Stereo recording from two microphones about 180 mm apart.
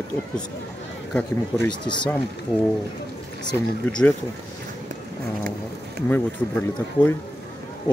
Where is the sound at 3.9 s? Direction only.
5° left (ahead or behind).